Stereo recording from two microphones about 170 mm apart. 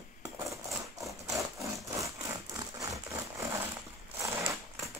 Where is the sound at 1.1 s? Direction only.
Centre (ahead or behind).